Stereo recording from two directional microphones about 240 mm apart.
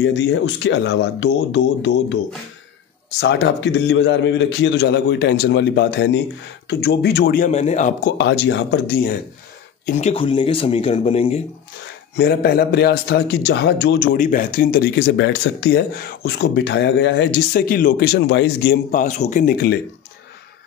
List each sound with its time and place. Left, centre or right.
0.0 s a man's voice: left
3.2 s a man's voice: left
8.2 s a man's voice: left
9.8 s speech: left
12.2 s a man's voice: left